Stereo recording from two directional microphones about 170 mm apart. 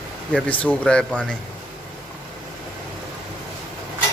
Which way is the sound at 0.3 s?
10° left (ahead or behind).